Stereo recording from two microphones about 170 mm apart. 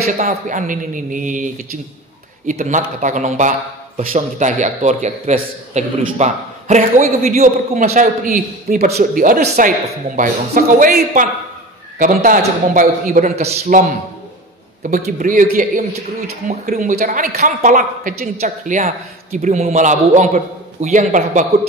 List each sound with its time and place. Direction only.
0.0 s a man's voice: 40° right (ahead or behind); by 12.9 s 60° right (ahead or behind)
13.1 s a man's voice: 50° right (ahead or behind)
17.3 s a man's voice: 40° right (ahead or behind)